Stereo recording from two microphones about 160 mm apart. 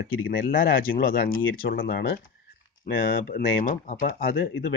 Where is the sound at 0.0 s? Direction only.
65° left (ahead or behind).